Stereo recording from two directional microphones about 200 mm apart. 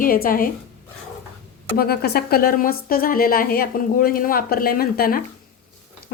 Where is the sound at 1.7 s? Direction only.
50° left (ahead or behind).